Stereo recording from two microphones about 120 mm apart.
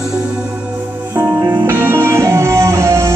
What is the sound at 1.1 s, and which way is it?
Music, 20° right (ahead or behind).